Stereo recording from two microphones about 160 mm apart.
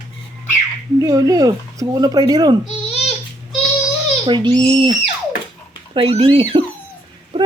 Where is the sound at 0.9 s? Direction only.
20° right (ahead or behind).